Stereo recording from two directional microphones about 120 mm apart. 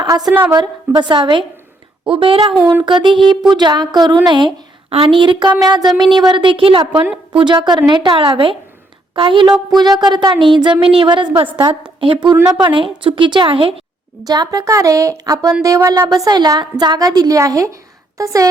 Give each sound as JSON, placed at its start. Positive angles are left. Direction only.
{"t": 0.5, "sound": "a woman's voice", "side_deg": -40}
{"t": 14.3, "sound": "a woman's voice", "side_deg": -30}